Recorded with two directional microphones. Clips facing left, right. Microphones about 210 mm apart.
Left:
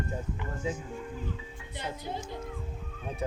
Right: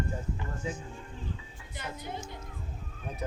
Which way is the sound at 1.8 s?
30° left (ahead or behind).